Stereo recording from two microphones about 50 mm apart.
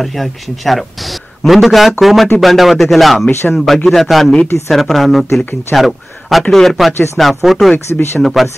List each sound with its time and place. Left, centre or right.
0.0 s a man's voice: centre
7.9 s speech: left
8.2 s a man's voice: centre